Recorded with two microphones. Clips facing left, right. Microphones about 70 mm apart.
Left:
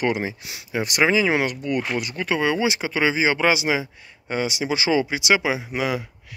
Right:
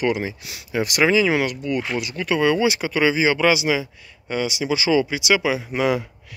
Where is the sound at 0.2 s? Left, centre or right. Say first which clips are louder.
Even; left.